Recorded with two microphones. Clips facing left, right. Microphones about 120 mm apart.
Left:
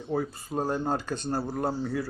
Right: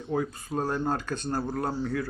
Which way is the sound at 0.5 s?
15° left (ahead or behind).